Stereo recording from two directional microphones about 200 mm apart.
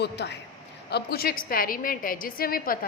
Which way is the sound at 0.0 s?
60° left (ahead or behind).